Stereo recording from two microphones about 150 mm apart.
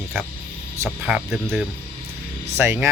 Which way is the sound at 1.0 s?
Centre (ahead or behind).